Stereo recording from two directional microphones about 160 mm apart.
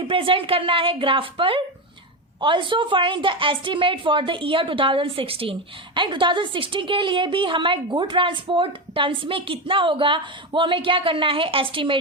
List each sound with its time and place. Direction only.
0.1 s a woman's voice: 35° right (ahead or behind)